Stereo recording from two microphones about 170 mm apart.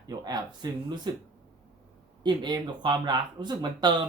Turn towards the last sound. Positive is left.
turn(degrees=-25)  # may be behind; listen again after turning